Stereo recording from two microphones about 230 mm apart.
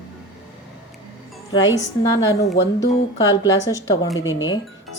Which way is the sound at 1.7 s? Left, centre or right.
Centre.